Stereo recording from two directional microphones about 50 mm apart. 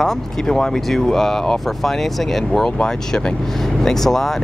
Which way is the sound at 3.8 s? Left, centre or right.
Centre.